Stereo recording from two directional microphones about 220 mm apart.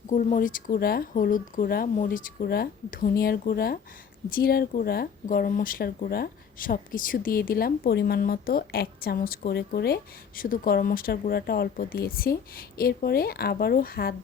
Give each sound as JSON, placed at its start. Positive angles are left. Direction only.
{"t": 0.1, "sound": "speech", "side_deg": 35}